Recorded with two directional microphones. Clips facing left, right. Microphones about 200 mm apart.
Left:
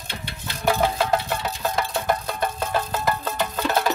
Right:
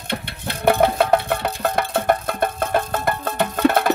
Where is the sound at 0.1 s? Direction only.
60° right (ahead or behind).